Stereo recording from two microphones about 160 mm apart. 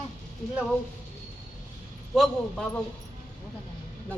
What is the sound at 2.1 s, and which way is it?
Speech, centre (ahead or behind).